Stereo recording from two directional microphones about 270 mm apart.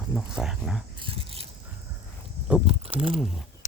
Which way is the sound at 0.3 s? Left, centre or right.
Centre.